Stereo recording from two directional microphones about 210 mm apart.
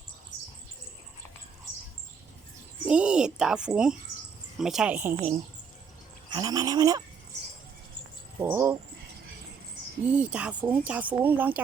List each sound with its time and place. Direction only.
2.8 s a woman's voice: 5° right (ahead or behind)
6.3 s speech: 15° right (ahead or behind)
8.4 s speech: 10° right (ahead or behind)
10.0 s speech: 5° right (ahead or behind)